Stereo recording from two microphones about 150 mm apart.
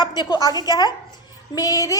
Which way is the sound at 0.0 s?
30° left (ahead or behind).